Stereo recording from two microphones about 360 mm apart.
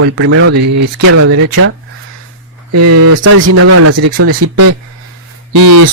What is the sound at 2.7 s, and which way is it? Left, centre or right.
Speech, right.